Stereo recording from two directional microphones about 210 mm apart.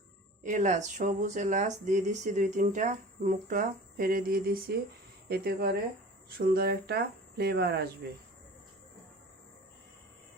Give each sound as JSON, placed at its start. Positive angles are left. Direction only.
{"t": 0.4, "sound": "speech", "side_deg": -35}